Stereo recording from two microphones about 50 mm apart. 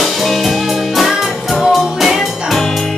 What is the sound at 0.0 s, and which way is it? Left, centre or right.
Music, centre.